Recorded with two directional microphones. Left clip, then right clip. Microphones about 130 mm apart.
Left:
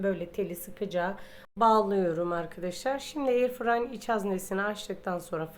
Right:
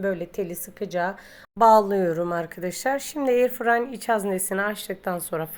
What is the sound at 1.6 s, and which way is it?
A woman's voice, 45° right (ahead or behind).